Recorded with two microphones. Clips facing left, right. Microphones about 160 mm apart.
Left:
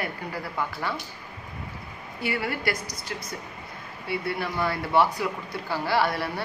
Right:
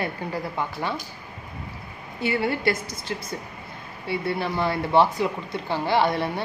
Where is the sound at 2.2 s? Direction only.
25° right (ahead or behind).